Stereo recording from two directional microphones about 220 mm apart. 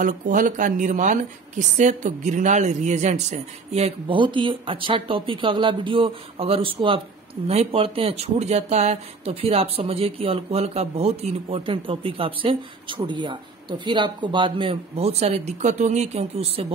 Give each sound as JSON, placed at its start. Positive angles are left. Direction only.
{"t": 0.0, "sound": "speech", "side_deg": -35}